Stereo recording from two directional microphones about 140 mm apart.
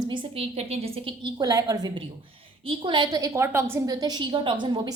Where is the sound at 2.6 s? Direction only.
40° right (ahead or behind).